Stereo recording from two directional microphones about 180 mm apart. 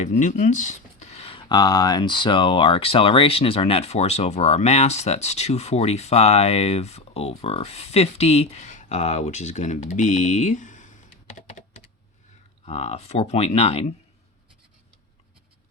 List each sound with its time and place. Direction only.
0.0 s speech: 40° left (ahead or behind)
11.3 s computer keyboard: 40° left (ahead or behind)
12.6 s speech: 35° left (ahead or behind)